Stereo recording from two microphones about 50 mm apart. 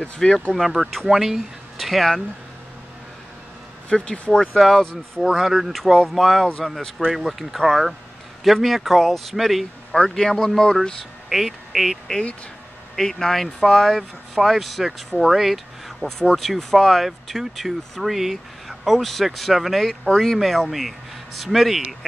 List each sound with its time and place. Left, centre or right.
0.0 s speech: centre
0.6 s speech: centre
3.9 s speech: centre
4.6 s speech: centre
11.2 s speech: centre
12.9 s speech: centre
16.2 s speech: centre